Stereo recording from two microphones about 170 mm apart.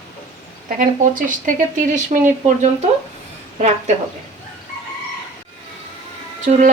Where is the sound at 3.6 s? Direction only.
45° right (ahead or behind).